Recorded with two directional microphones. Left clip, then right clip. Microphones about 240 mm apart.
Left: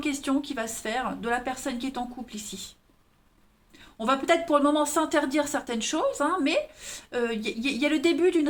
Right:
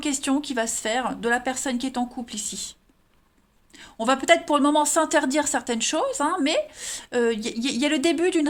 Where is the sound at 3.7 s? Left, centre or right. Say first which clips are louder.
Right 3 dB; right.